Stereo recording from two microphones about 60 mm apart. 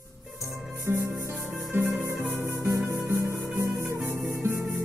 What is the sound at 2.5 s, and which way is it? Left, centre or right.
Music, right.